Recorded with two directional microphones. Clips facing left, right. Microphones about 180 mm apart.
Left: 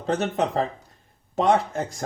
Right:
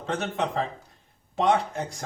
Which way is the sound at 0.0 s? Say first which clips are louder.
Left 4 dB; 35° left (ahead or behind).